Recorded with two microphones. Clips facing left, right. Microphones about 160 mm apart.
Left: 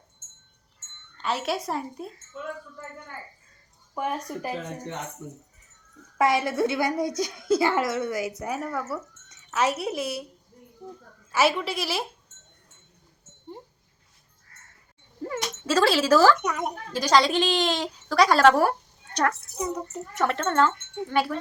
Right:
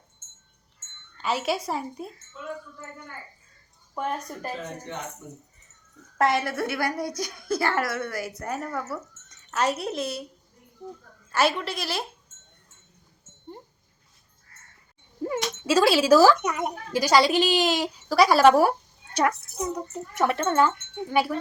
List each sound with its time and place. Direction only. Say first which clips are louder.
1.2 s speech: right 1 dB; centre (ahead or behind)
3.9 s speech: left 1 dB; 10° left (ahead or behind)
6.1 s speech: left 1 dB; 10° left (ahead or behind)
8.4 s speech: left 1 dB; 5° left (ahead or behind)
11.3 s speech: left 1 dB; 5° left (ahead or behind)
15.3 s speech: right 2 dB; 10° right (ahead or behind)
20.1 s speech: right 1 dB; 10° right (ahead or behind)